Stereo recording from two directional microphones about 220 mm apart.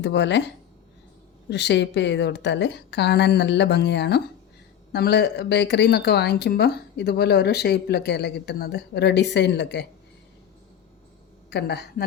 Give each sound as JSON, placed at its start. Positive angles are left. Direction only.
{"t": 0.0, "sound": "speech", "side_deg": 55}
{"t": 1.5, "sound": "speech", "side_deg": 50}
{"t": 11.5, "sound": "speech", "side_deg": 50}